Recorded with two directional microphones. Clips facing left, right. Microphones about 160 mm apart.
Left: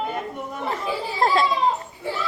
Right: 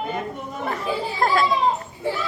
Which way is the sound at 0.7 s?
25° left (ahead or behind).